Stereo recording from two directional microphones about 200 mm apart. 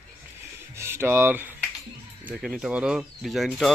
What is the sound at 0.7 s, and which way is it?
Speech, 10° right (ahead or behind).